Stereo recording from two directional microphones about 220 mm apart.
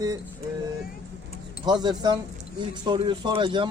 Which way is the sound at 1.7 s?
20° right (ahead or behind).